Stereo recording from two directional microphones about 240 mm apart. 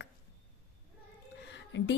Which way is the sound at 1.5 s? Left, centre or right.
Left.